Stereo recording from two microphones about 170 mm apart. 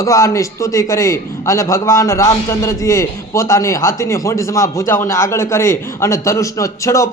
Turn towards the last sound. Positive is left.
turn(degrees=20)  # may be behind; listen again after turning